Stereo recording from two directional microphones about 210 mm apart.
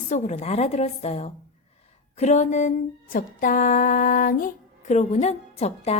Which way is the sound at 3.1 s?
40° left (ahead or behind).